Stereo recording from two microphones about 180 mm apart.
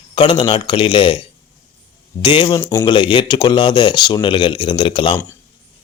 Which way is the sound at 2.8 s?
25° left (ahead or behind).